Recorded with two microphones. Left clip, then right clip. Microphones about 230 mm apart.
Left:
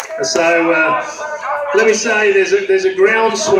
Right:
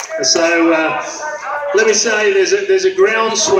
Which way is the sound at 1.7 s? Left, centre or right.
Centre.